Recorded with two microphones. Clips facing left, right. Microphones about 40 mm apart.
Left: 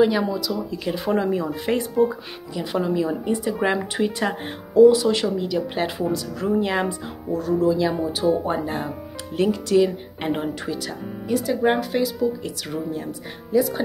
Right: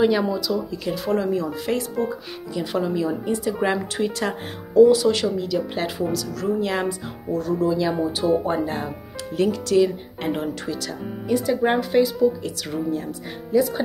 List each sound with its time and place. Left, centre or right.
0.0 s speech: centre
0.9 s speech: left
2.0 s speech: centre
6.1 s speech: centre